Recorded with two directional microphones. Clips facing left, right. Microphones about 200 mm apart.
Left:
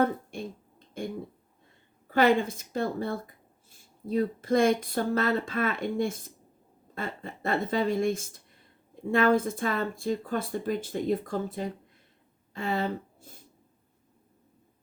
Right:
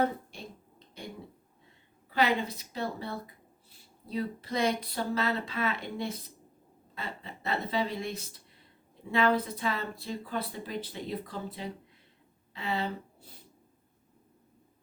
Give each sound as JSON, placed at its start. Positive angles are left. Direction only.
{"t": 0.0, "sound": "speech", "side_deg": 50}
{"t": 1.0, "sound": "a sound", "side_deg": 50}
{"t": 2.0, "sound": "speech", "side_deg": 50}